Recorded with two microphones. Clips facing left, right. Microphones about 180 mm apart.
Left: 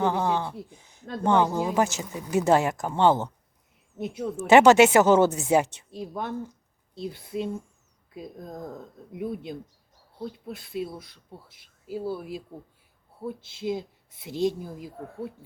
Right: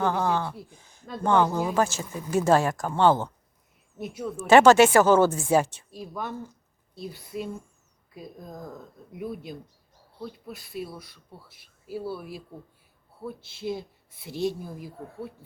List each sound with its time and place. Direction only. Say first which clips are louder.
0.0 s speech: even; 20° left (ahead or behind)